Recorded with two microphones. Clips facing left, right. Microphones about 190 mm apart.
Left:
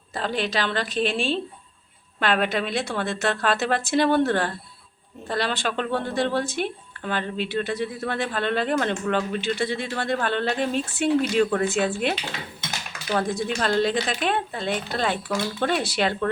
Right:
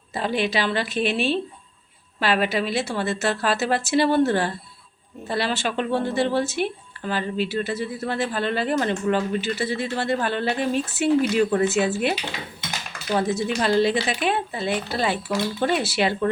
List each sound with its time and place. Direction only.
0.1 s speech: 10° right (ahead or behind)
13.1 s speech: 5° right (ahead or behind)